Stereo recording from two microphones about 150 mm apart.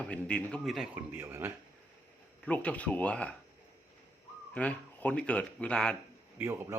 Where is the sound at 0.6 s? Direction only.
5° right (ahead or behind).